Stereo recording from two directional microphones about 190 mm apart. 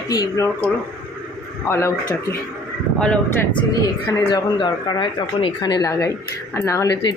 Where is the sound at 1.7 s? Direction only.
15° left (ahead or behind).